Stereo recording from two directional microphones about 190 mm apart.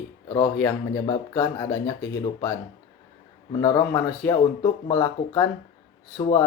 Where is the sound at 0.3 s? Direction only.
20° left (ahead or behind).